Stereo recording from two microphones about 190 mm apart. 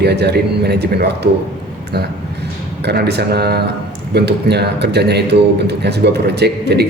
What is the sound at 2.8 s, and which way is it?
Speech, 60° right (ahead or behind).